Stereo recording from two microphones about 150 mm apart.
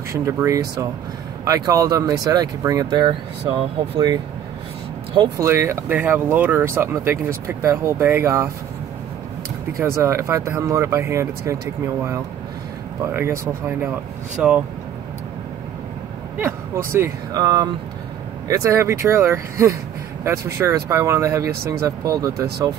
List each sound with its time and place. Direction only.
0.1 s speech: 20° right (ahead or behind)
5.4 s speech: 20° right (ahead or behind)
9.8 s speech: 20° right (ahead or behind)
16.3 s speech: 15° right (ahead or behind)